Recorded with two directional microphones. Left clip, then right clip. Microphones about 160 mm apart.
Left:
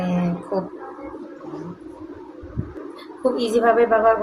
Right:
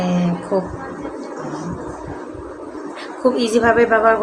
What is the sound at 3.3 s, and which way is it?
Speech, 15° right (ahead or behind).